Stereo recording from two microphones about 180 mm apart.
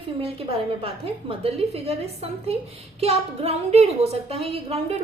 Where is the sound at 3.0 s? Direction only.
35° right (ahead or behind).